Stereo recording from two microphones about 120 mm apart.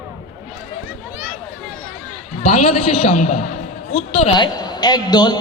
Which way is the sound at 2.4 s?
50° left (ahead or behind).